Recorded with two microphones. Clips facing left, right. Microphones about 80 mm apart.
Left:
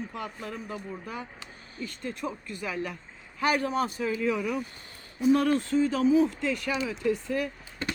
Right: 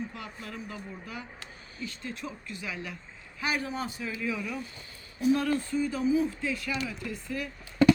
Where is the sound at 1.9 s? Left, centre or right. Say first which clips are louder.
Left 5 dB; left.